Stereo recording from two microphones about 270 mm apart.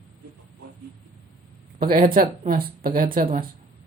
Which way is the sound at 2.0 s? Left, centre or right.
Right.